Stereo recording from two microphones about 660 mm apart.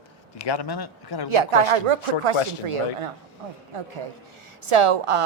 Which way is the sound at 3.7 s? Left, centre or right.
Right.